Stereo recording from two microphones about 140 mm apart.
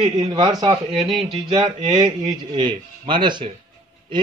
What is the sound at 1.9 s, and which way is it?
A man's voice, 35° right (ahead or behind).